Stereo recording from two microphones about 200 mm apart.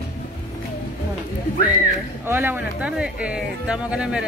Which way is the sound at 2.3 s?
10° right (ahead or behind).